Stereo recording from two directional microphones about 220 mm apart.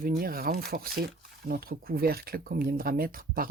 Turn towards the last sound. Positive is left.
turn(degrees=-40)  # may be behind; listen again after turning